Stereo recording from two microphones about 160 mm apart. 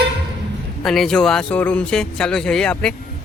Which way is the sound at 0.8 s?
5° left (ahead or behind).